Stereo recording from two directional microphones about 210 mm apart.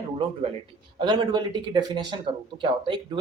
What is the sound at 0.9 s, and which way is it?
Speech, 20° right (ahead or behind).